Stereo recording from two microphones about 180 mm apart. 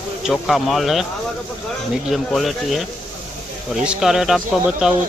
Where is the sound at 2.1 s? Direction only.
Centre (ahead or behind).